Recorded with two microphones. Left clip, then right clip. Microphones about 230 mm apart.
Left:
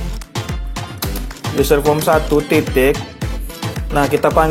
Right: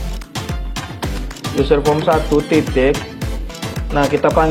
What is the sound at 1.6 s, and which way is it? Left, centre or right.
Speech, left.